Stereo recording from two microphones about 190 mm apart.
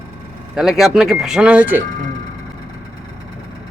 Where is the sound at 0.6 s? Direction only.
Centre (ahead or behind).